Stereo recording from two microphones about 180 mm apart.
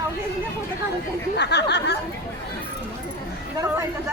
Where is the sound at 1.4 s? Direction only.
70° left (ahead or behind).